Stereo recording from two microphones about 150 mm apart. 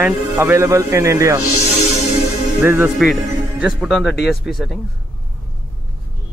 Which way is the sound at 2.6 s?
15° right (ahead or behind).